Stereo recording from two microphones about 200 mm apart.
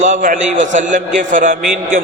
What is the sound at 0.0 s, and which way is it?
A man's voice, 40° right (ahead or behind).